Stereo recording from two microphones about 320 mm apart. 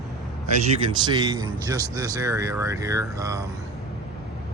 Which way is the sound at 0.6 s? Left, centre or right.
Centre.